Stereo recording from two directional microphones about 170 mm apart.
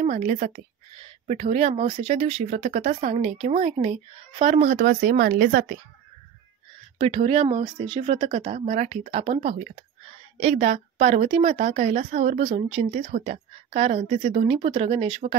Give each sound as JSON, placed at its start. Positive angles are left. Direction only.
{"t": 0.0, "sound": "a woman's voice", "side_deg": -45}
{"t": 7.0, "sound": "a woman's voice", "side_deg": -40}
{"t": 12.9, "sound": "speech", "side_deg": -50}